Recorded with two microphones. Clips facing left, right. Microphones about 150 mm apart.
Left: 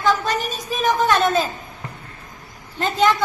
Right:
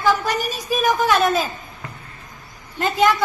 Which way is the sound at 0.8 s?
Centre (ahead or behind).